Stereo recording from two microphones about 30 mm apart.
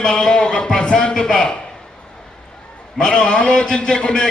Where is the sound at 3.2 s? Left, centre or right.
Left.